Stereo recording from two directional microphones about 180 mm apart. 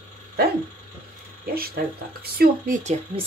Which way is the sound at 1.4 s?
55° right (ahead or behind).